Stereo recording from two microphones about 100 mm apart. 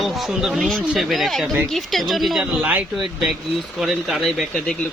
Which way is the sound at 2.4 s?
15° right (ahead or behind).